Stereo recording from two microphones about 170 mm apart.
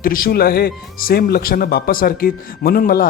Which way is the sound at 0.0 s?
55° left (ahead or behind).